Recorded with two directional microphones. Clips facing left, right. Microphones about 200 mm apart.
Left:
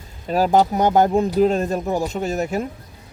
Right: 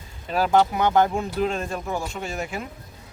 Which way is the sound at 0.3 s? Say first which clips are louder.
Left 3 dB; 40° left (ahead or behind).